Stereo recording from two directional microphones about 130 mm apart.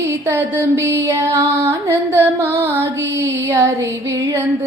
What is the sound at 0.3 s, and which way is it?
Music, 20° right (ahead or behind).